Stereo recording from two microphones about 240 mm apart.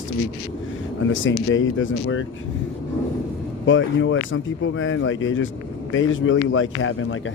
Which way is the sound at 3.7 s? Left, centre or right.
Left.